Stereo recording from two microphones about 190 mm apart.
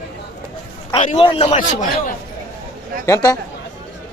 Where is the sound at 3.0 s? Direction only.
15° left (ahead or behind).